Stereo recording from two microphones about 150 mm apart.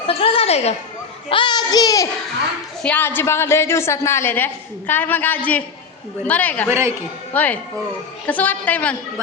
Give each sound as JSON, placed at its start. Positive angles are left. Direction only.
{"t": 0.1, "sound": "a sound", "side_deg": 40}
{"t": 1.3, "sound": "a child's voice", "side_deg": 30}
{"t": 2.8, "sound": "a woman's voice", "side_deg": 10}
{"t": 6.7, "sound": "a man's voice", "side_deg": -15}
{"t": 7.3, "sound": "a woman's voice", "side_deg": 10}